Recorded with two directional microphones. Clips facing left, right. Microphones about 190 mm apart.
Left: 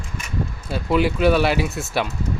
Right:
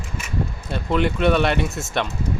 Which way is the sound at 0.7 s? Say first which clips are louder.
Left 2 dB; 5° left (ahead or behind).